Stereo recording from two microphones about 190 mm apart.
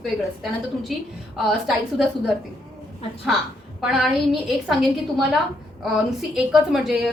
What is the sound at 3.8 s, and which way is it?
Speech, 5° right (ahead or behind).